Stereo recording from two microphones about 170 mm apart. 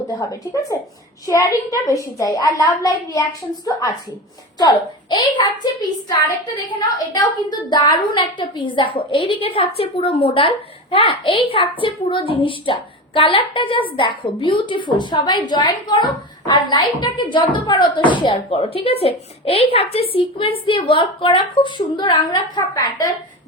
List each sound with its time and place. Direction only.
0.2 s speech: 20° left (ahead or behind)
3.7 s speech: 20° left (ahead or behind)
6.7 s speech: 25° left (ahead or behind)